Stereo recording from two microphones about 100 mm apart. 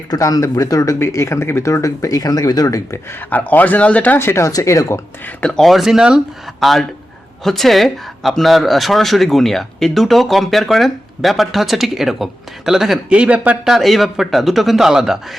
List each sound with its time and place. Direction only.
0.1 s speech: 40° left (ahead or behind)
5.5 s speech: centre (ahead or behind); by 13.7 s 15° right (ahead or behind)
13.7 s speech: centre (ahead or behind)